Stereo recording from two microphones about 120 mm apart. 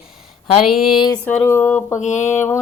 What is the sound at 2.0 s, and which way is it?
Mantra, 80° left.